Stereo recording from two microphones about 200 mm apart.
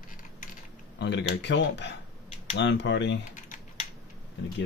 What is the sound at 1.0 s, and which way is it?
Speech, 60° left (ahead or behind).